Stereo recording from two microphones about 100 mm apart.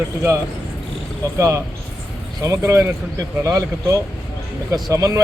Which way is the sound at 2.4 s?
30° right (ahead or behind).